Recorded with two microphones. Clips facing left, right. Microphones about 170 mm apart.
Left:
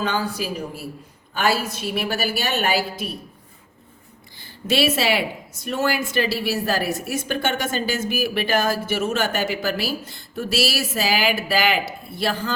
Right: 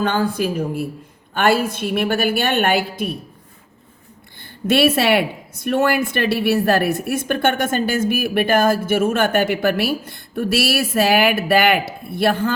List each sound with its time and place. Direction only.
0.0 s speech: 50° right (ahead or behind)
4.4 s speech: 55° right (ahead or behind)